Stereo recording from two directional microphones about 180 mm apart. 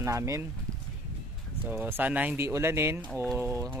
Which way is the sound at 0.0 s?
15° right (ahead or behind).